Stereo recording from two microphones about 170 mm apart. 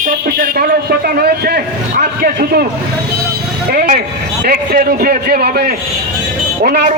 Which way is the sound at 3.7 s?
55° right (ahead or behind).